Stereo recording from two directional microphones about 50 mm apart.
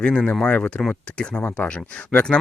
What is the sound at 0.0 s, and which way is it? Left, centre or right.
Speech, centre.